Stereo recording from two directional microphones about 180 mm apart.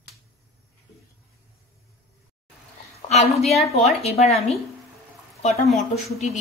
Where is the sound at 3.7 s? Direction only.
35° left (ahead or behind).